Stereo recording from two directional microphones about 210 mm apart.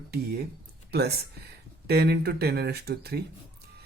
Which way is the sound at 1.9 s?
50° right (ahead or behind).